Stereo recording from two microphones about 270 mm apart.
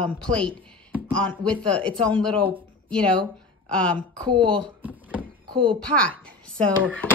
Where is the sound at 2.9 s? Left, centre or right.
Centre.